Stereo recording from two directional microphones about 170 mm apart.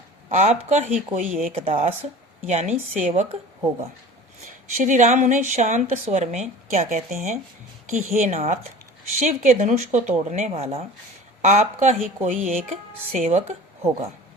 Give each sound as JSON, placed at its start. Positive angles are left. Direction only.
{"t": 0.3, "sound": "speech", "side_deg": -40}
{"t": 1.5, "sound": "a woman's voice", "side_deg": -35}
{"t": 4.4, "sound": "speech", "side_deg": -45}